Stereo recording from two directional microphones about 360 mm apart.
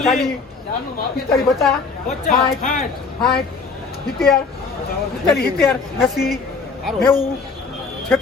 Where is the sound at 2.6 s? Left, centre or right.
Left.